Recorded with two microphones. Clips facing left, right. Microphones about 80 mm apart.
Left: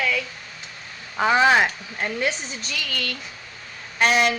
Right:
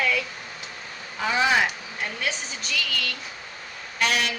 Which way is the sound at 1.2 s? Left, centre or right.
Left.